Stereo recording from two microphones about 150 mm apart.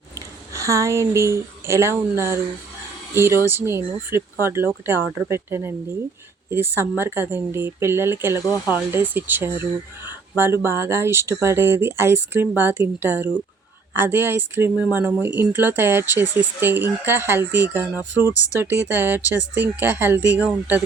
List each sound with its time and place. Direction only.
0.1 s speech: 20° right (ahead or behind)
17.9 s speech: 25° left (ahead or behind)
18.6 s speech: 15° right (ahead or behind)